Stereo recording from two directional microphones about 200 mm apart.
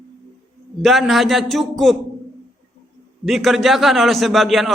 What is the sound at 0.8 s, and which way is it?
A man's voice, centre (ahead or behind).